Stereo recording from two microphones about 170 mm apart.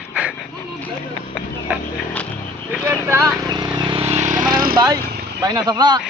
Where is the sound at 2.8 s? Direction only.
15° right (ahead or behind).